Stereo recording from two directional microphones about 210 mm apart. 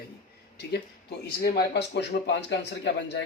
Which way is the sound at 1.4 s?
50° left (ahead or behind).